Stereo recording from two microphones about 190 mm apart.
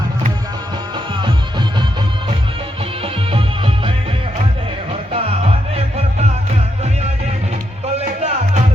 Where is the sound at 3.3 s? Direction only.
30° right (ahead or behind).